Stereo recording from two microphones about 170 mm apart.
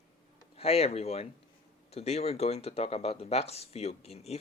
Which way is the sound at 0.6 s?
35° left (ahead or behind).